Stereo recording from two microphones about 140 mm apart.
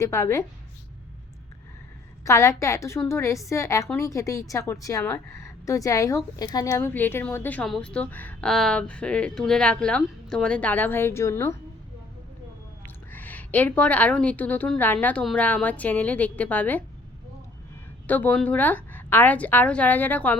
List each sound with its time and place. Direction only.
0.0 s a woman's voice: 20° left (ahead or behind)
2.2 s a woman's voice: 20° left (ahead or behind)
12.8 s a woman's voice: 10° left (ahead or behind)
18.1 s speech: 10° left (ahead or behind)